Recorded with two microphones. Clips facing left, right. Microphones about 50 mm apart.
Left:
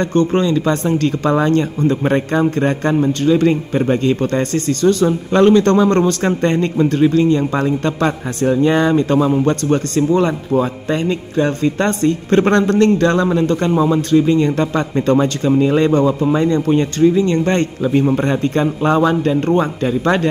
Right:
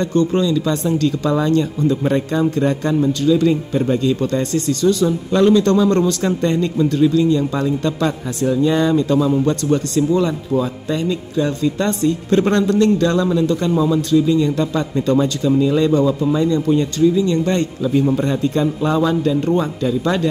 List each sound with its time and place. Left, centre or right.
0.0 s speech: left